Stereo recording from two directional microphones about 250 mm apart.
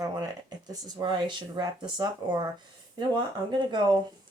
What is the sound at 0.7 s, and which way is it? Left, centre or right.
Speech, centre.